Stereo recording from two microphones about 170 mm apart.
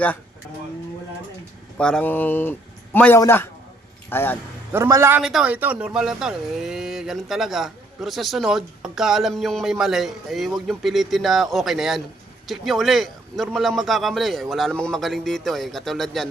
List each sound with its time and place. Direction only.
1.8 s speech: 5° left (ahead or behind)
4.7 s a man's voice: 15° right (ahead or behind)
5.2 s speech: 5° right (ahead or behind)